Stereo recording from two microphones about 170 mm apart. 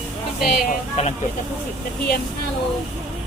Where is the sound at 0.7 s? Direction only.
40° left (ahead or behind).